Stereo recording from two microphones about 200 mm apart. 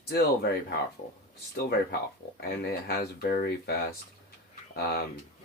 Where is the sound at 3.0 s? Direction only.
50° left (ahead or behind).